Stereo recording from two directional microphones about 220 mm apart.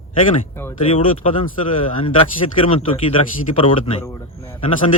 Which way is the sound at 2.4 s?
25° left (ahead or behind).